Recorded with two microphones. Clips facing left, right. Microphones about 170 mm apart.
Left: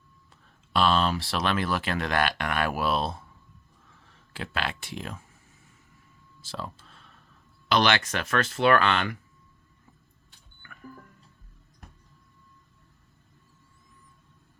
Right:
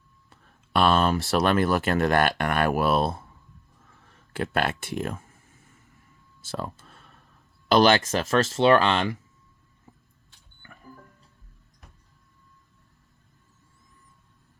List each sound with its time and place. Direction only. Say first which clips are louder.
0.7 s speech: right 3 dB; 55° right (ahead or behind)
4.3 s speech: right 6 dB; 50° right (ahead or behind)
6.5 s a sound: right 4 dB; 45° right (ahead or behind)
7.7 s speech: right 5 dB; 45° right (ahead or behind)
8.0 s speech: right 5 dB; 25° right (ahead or behind)